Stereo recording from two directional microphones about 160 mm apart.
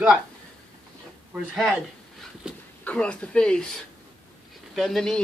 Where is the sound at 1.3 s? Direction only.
5° right (ahead or behind).